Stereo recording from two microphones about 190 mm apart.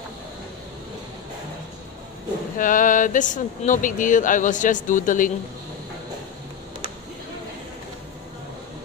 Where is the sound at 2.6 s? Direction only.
45° left (ahead or behind).